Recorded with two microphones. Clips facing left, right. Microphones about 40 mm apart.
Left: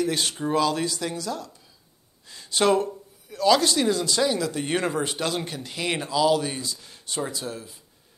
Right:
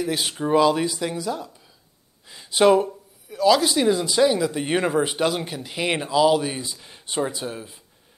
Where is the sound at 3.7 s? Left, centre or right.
Centre.